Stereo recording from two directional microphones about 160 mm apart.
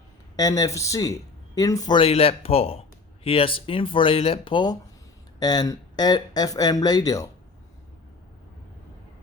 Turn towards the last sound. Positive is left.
turn(degrees=20)  # may be behind; listen again after turning